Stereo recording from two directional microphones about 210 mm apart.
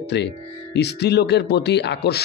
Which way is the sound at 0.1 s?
55° left (ahead or behind).